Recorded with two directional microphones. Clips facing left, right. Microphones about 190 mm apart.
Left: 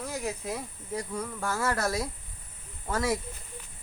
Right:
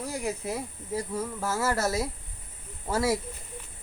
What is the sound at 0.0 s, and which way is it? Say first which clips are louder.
Speech: right 2 dB; 10° right (ahead or behind).